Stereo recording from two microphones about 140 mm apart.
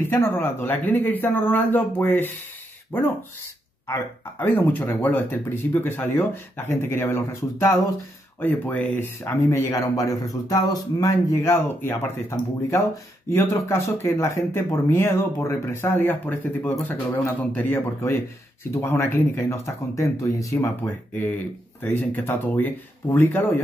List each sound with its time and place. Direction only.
0.0 s a man's voice: 15° left (ahead or behind)